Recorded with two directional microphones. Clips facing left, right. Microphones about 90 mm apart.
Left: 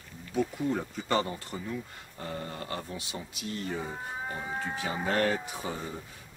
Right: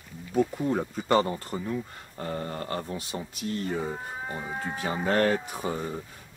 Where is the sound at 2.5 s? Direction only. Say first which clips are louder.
Right 5 dB; 40° right (ahead or behind).